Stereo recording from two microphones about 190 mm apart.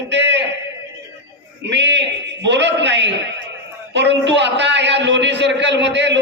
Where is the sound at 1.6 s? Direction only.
70° right (ahead or behind).